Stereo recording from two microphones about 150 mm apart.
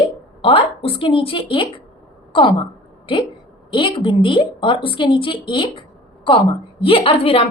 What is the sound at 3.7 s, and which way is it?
A woman's voice, 35° left (ahead or behind).